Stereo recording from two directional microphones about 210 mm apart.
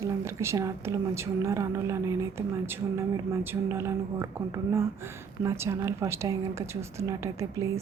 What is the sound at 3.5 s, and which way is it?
Speech, 10° right (ahead or behind).